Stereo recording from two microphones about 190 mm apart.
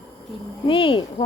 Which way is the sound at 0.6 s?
25° left (ahead or behind).